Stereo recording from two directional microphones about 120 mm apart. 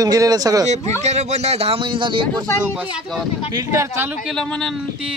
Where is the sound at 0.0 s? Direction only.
30° right (ahead or behind).